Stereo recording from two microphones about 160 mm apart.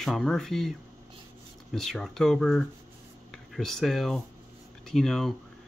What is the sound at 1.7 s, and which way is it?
Speech, centre (ahead or behind).